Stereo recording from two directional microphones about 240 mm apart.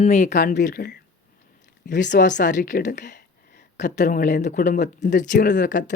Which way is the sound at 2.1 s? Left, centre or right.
Left.